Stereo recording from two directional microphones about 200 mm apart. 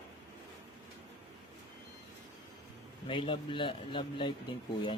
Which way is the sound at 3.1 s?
25° left (ahead or behind).